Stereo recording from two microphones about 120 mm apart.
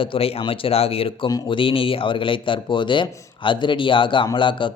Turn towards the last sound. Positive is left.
turn(degrees=45)  # may be behind; listen again after turning